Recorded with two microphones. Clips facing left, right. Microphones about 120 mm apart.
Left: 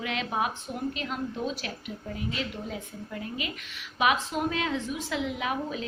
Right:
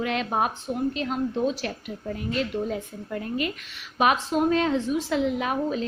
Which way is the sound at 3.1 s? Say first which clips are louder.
Right 7 dB; 50° right (ahead or behind).